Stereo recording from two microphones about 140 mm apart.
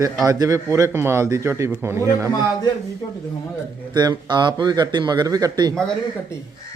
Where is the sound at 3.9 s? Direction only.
30° right (ahead or behind).